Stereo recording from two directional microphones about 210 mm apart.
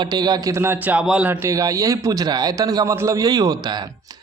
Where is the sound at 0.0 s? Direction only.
20° right (ahead or behind).